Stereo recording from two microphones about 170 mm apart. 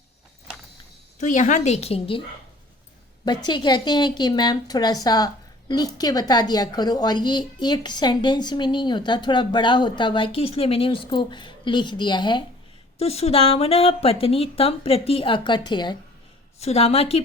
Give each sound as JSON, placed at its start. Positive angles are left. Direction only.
{"t": 1.2, "sound": "speech", "side_deg": 45}
{"t": 3.2, "sound": "a woman's voice", "side_deg": 25}
{"t": 13.0, "sound": "speech", "side_deg": 35}
{"t": 16.6, "sound": "speech", "side_deg": 40}